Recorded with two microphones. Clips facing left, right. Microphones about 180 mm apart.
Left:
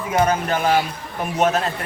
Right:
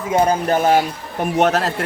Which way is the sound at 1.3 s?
70° right (ahead or behind).